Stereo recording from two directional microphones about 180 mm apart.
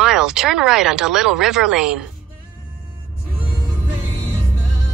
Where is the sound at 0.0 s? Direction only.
5° right (ahead or behind).